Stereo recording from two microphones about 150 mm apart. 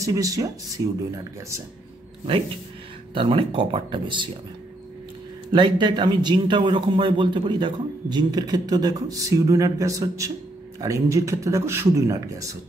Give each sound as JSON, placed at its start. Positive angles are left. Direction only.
{"t": 0.0, "sound": "a man's voice", "side_deg": -25}
{"t": 3.2, "sound": "speech", "side_deg": -35}
{"t": 5.5, "sound": "a man's voice", "side_deg": -30}